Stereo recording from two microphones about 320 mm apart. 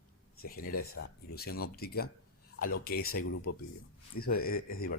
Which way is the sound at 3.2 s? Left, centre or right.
Left.